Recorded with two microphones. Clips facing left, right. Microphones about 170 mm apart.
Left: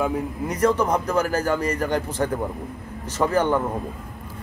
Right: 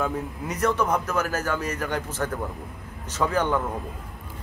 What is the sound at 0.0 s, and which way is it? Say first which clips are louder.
Speech: left 4 dB; 10° left (ahead or behind).